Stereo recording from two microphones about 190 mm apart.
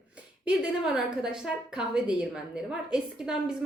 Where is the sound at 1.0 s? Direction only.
5° right (ahead or behind).